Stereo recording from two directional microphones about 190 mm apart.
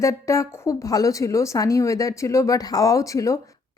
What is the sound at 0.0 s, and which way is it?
A woman's voice, 15° left (ahead or behind).